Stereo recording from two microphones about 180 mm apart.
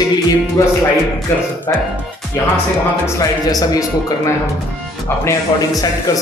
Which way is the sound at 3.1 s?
20° left (ahead or behind).